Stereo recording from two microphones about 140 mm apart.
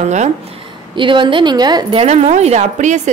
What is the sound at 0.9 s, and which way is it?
A woman's voice, 35° right (ahead or behind).